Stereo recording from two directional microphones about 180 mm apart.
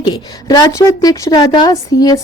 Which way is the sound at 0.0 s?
20° left (ahead or behind).